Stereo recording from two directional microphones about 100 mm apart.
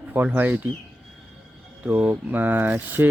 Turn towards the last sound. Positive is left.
turn(degrees=-20)  # may be behind; listen again after turning